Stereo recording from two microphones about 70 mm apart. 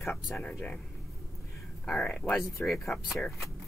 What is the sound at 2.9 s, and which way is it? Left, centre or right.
Speech, centre.